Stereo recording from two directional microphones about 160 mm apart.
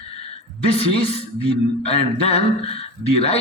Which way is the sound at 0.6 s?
35° left (ahead or behind).